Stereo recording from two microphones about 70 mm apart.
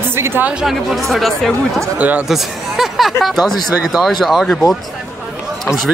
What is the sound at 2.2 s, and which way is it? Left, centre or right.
Speech, centre.